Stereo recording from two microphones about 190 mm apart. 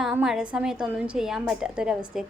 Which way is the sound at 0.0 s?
5° right (ahead or behind).